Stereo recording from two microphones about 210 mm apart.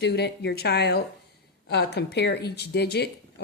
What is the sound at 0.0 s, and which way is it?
A woman's voice, 50° left (ahead or behind).